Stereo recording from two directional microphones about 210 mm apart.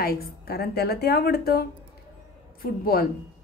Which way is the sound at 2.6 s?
45° left (ahead or behind).